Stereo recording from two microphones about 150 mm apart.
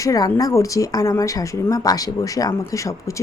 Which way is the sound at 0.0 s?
20° left (ahead or behind).